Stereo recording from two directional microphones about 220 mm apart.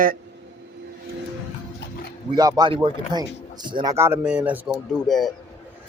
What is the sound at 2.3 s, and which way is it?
Speech, 15° right (ahead or behind).